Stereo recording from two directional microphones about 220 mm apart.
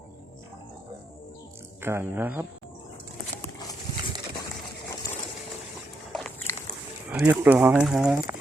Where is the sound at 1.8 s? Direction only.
10° right (ahead or behind).